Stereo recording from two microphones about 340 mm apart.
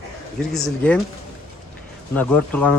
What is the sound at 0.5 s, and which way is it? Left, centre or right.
Speech, centre.